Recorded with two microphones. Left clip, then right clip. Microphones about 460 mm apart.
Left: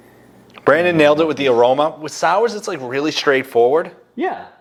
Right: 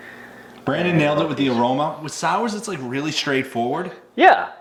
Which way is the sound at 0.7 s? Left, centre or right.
Left.